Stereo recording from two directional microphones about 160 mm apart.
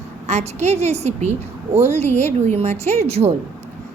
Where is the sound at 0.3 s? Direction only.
45° right (ahead or behind).